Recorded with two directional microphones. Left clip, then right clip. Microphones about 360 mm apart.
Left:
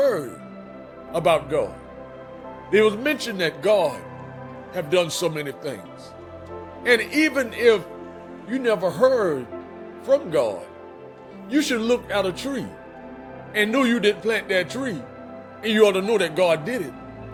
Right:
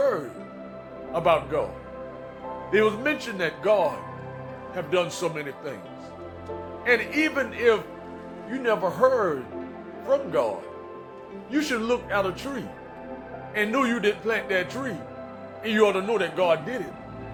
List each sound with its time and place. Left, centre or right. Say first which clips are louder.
1.1 s speech: left 2 dB; centre
2.7 s speech: left 4 dB; centre
6.8 s speech: left 4 dB; centre
11.5 s speech: left 4 dB; centre